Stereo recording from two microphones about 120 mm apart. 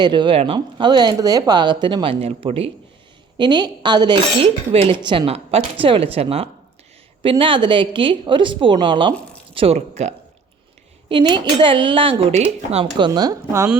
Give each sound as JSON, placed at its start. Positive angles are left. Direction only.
{"t": 0.0, "sound": "speech", "side_deg": -40}
{"t": 3.3, "sound": "a woman's voice", "side_deg": -40}
{"t": 9.7, "sound": "speech", "side_deg": -70}
{"t": 11.1, "sound": "a woman's voice", "side_deg": -40}
{"t": 12.2, "sound": "speech", "side_deg": -60}
{"t": 13.0, "sound": "speech", "side_deg": -35}